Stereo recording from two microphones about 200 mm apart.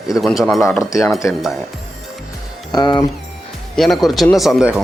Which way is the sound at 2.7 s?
20° left (ahead or behind).